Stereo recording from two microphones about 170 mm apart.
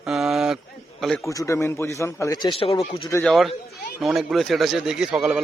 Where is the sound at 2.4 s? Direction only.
30° left (ahead or behind).